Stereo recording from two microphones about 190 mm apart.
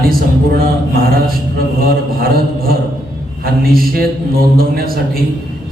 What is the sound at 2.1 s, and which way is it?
A man's voice, 50° right (ahead or behind).